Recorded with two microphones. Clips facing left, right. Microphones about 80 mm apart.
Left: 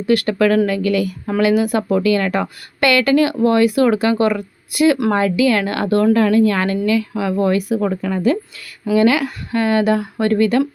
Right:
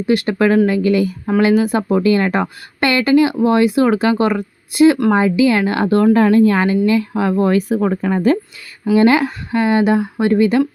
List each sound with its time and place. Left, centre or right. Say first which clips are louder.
0.0 s a woman's voice: even; right